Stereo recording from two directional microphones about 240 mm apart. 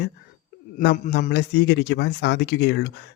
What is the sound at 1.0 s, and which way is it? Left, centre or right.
Speech, left.